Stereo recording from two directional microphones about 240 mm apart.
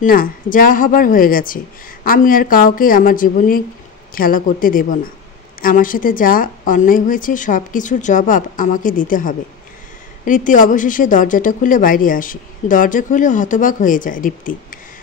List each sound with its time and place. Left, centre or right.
0.0 s a woman's voice: left